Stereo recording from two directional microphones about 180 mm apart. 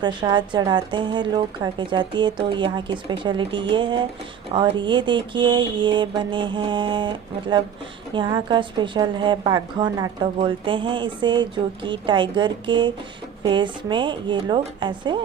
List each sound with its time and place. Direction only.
0.0 s a woman's voice: 25° right (ahead or behind)